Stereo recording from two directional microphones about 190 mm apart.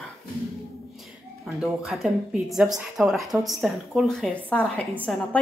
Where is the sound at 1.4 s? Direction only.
Centre (ahead or behind).